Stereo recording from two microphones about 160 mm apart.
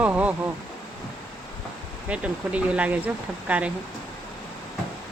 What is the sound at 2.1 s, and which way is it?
Speech, 10° right (ahead or behind).